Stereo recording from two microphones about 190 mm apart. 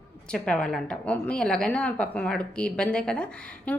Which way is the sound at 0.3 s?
5° left (ahead or behind).